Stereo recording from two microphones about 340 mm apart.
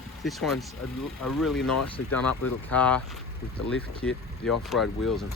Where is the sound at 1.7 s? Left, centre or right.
Left.